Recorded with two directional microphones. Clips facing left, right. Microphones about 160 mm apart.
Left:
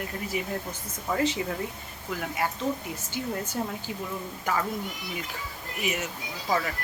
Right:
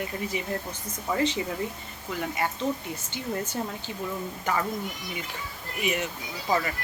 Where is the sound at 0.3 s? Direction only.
5° left (ahead or behind).